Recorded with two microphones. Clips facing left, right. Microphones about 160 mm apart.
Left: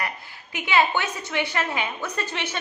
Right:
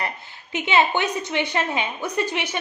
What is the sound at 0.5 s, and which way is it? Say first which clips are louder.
A woman's voice: right 2 dB; 20° right (ahead or behind).